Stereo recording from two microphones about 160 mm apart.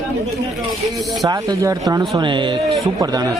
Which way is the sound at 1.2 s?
25° right (ahead or behind).